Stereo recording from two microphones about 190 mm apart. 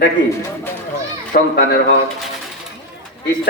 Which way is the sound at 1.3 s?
55° left (ahead or behind).